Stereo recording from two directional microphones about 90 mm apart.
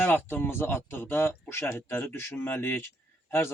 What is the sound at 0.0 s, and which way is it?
Speech, 25° left (ahead or behind).